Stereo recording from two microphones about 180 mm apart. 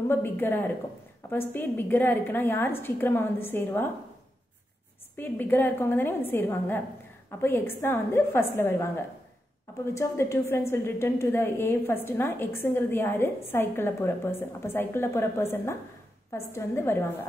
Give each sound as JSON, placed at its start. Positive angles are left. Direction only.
{"t": 0.1, "sound": "a woman's voice", "side_deg": 10}
{"t": 5.1, "sound": "a woman's voice", "side_deg": 10}